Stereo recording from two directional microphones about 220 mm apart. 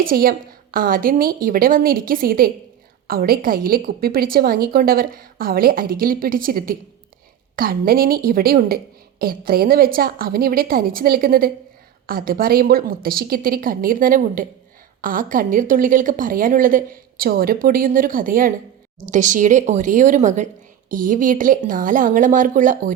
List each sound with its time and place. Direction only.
0.0 s a woman's voice: 40° right (ahead or behind)